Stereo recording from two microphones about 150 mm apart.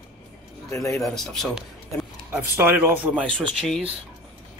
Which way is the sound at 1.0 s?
Centre (ahead or behind).